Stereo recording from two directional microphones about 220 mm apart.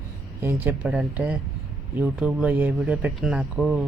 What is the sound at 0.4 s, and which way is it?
Speech, 10° right (ahead or behind).